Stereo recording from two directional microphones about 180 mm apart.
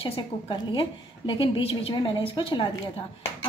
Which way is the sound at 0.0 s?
30° left (ahead or behind).